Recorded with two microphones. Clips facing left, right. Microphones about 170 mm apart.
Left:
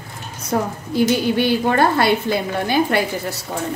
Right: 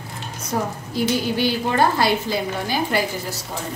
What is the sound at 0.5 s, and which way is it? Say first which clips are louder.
Speech: left 4 dB; 65° left (ahead or behind).